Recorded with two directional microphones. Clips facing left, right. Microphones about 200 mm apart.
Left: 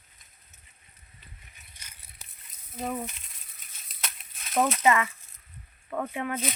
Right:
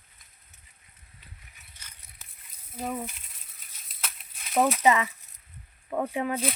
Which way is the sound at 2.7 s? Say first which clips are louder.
Even; 5° right (ahead or behind).